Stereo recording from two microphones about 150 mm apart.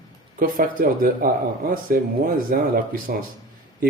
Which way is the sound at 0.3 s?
70° right (ahead or behind).